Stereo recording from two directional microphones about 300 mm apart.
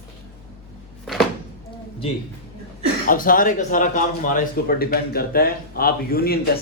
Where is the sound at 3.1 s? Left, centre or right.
Left.